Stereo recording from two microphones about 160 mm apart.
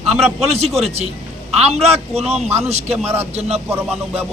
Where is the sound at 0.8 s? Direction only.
40° right (ahead or behind).